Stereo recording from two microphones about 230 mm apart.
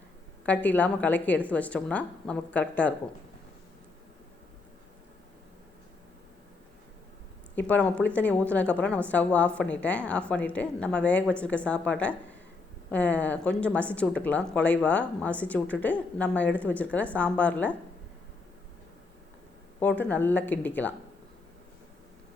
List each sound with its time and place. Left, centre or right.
0.4 s speech: centre
7.5 s a woman's voice: centre
19.8 s speech: centre